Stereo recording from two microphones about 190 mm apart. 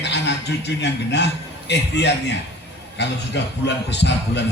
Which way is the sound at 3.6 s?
65° left (ahead or behind).